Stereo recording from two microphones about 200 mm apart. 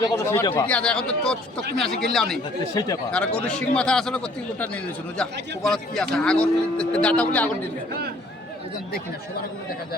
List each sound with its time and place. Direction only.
0.0 s a man's voice: 15° left (ahead or behind); by 2.4 s centre (ahead or behind)
2.7 s speech: 20° left (ahead or behind)
3.1 s a man's voice: 5° left (ahead or behind)